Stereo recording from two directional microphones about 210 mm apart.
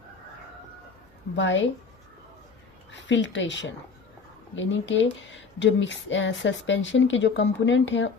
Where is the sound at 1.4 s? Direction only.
60° left (ahead or behind).